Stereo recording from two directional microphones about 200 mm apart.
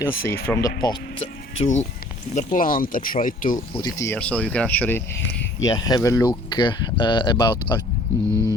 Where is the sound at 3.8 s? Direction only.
15° left (ahead or behind).